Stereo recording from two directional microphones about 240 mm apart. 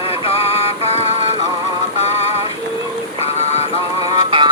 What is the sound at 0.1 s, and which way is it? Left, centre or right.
Synthetic singing, left.